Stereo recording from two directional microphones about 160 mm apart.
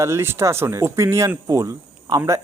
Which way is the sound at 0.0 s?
15° right (ahead or behind).